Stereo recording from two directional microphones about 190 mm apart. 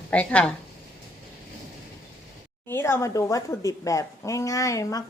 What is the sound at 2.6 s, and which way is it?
A woman's voice, 15° left (ahead or behind).